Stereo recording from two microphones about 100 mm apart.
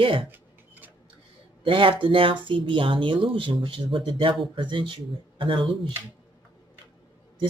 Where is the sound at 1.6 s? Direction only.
55° right (ahead or behind).